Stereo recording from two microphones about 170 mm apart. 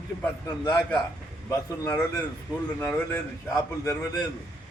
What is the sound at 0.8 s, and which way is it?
Speech, 5° left (ahead or behind).